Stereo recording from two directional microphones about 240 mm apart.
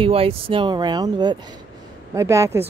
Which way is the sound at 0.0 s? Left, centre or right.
Right.